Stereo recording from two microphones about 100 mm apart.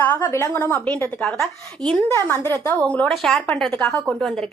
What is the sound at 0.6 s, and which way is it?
Speech, 15° left (ahead or behind).